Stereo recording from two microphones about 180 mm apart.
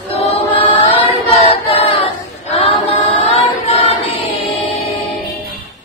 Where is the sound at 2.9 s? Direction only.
30° left (ahead or behind).